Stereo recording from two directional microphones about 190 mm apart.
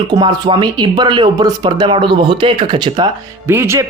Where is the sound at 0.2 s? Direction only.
25° right (ahead or behind).